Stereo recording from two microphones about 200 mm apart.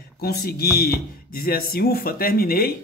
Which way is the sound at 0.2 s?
50° left (ahead or behind).